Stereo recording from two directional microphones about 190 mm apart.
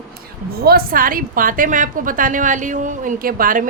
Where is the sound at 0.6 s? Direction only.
55° right (ahead or behind).